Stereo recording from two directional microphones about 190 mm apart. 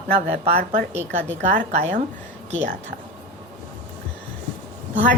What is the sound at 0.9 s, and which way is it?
Mantra, 40° right (ahead or behind).